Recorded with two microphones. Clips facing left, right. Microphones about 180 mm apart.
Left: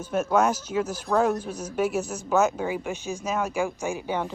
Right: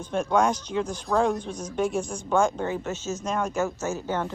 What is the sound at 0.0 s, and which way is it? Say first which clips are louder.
Speech: left 1 dB; 5° left (ahead or behind).